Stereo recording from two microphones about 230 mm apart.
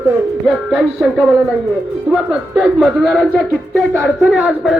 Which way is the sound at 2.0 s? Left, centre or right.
Centre.